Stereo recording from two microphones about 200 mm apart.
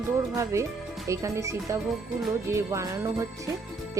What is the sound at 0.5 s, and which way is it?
Speech, 15° right (ahead or behind).